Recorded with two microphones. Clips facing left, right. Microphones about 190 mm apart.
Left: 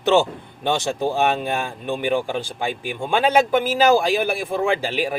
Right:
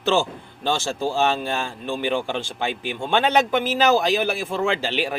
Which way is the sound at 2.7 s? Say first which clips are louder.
Even; 45° left (ahead or behind).